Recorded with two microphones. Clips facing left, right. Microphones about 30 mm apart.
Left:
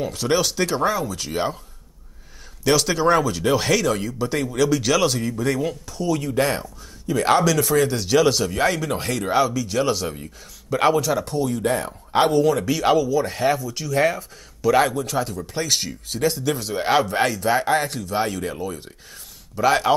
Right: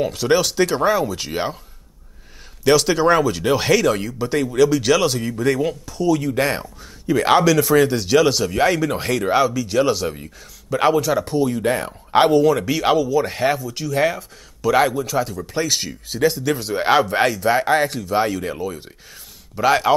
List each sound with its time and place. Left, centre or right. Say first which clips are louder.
0.0 s speech: right 4 dB; centre
0.9 s speech: right 3 dB; right
2.6 s speech: right 3 dB; centre